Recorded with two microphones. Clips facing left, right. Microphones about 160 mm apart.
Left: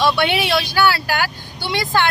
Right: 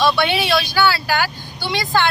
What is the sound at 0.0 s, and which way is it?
Speech, 15° left (ahead or behind).